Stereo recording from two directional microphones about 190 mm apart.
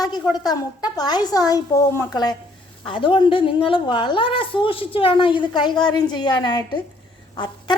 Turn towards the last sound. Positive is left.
turn(degrees=25)  # may be behind; listen again after turning